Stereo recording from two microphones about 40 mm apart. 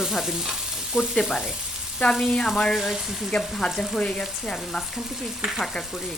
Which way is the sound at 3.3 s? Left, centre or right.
Centre.